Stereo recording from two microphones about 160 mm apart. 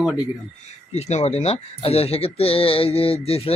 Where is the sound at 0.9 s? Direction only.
45° left (ahead or behind).